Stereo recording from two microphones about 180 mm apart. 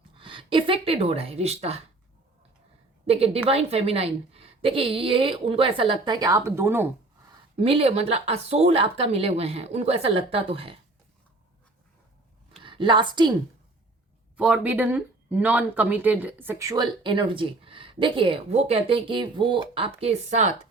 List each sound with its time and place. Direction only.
0.2 s speech: 30° right (ahead or behind)
3.1 s a woman's voice: 35° right (ahead or behind); by 6.8 s 15° right (ahead or behind)
7.5 s a woman's voice: 30° right (ahead or behind)
12.6 s a woman's voice: 30° right (ahead or behind)
14.3 s speech: 5° right (ahead or behind); by 20.5 s 40° right (ahead or behind)